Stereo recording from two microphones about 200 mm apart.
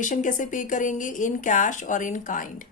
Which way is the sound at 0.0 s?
40° left (ahead or behind).